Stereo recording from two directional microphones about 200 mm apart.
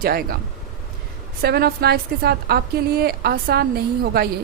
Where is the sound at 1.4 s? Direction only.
50° right (ahead or behind).